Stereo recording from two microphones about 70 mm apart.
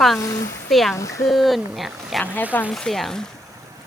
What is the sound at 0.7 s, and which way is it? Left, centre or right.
Speech, centre.